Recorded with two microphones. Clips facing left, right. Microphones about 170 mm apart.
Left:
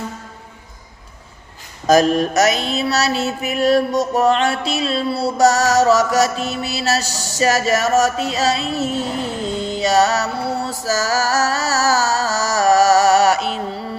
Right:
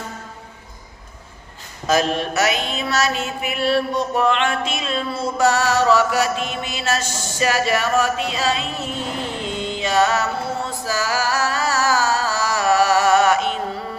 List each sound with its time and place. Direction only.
1.9 s mantra: 40° left (ahead or behind)